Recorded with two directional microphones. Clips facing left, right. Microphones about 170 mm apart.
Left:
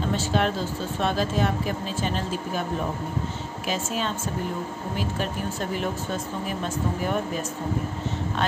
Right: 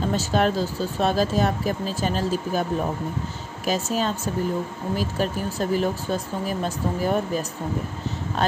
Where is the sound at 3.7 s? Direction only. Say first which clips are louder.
Right 4 dB; 40° right (ahead or behind).